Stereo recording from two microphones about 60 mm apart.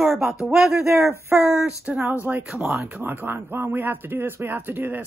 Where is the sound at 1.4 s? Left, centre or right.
Centre.